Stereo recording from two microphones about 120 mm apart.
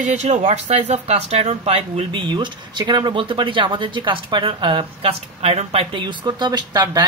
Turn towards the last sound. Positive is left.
turn(degrees=-35)  # may be behind; listen again after turning